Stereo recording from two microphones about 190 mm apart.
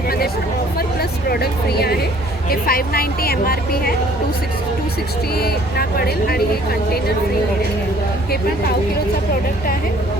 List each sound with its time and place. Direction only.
1.3 s speech: 55° left (ahead or behind)
5.4 s speech: 55° left (ahead or behind)